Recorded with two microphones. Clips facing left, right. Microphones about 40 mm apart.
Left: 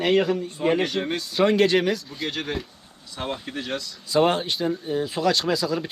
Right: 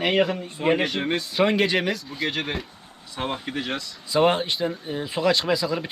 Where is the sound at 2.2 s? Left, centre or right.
Centre.